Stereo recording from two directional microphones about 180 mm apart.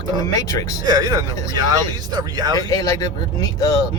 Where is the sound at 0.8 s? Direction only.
20° right (ahead or behind).